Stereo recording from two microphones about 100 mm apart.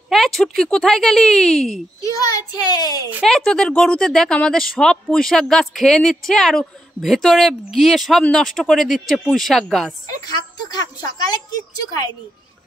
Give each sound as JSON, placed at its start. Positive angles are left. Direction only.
{"t": 0.1, "sound": "a woman's voice", "side_deg": 5}
{"t": 2.1, "sound": "a child's voice", "side_deg": 40}
{"t": 3.2, "sound": "a woman's voice", "side_deg": 5}
{"t": 10.2, "sound": "speech", "side_deg": 40}